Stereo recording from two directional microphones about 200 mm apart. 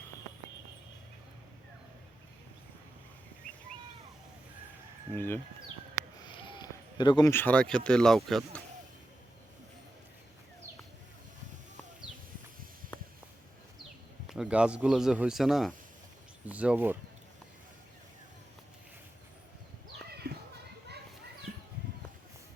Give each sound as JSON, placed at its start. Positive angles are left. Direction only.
{"t": 5.1, "sound": "speech", "side_deg": 10}
{"t": 6.2, "sound": "a sound", "side_deg": 25}
{"t": 7.9, "sound": "speech", "side_deg": 5}
{"t": 14.3, "sound": "speech", "side_deg": -5}
{"t": 20.2, "sound": "children playing", "side_deg": -50}